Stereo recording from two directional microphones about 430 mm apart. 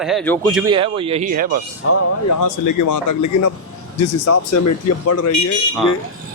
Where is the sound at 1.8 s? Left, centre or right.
Left.